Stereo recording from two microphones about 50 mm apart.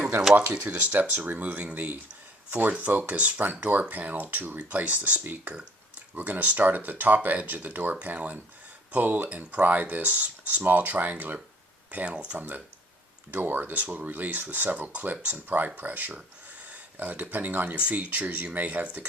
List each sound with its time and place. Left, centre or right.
0.3 s speech: right
12.0 s speech: centre
12.4 s speech: right
17.7 s speech: right